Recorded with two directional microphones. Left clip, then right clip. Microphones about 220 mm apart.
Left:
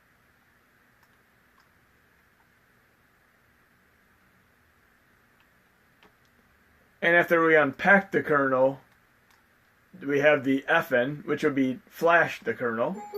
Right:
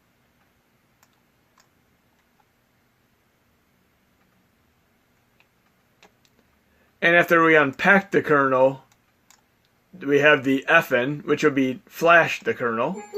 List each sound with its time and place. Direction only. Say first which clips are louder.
7.0 s speech: right 4 dB; 40° right (ahead or behind)
10.0 s speech: right 5 dB; 40° right (ahead or behind)